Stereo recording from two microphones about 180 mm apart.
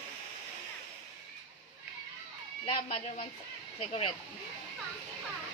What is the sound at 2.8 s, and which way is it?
Speech, 40° left (ahead or behind).